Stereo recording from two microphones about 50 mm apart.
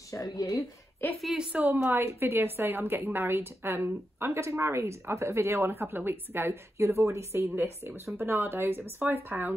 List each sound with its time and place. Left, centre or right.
0.1 s speech: left
1.0 s a woman's voice: left
1.5 s speech: right
1.8 s a woman's voice: right
6.5 s speech: right
7.6 s a woman's voice: right